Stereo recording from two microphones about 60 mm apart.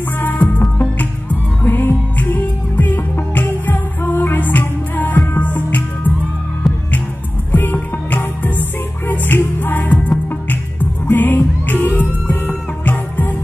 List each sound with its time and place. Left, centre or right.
0.2 s music: left
7.5 s music: left